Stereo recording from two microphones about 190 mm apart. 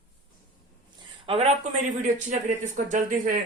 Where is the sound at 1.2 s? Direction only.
35° right (ahead or behind).